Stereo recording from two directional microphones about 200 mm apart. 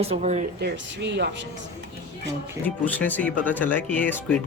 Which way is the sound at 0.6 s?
60° right (ahead or behind).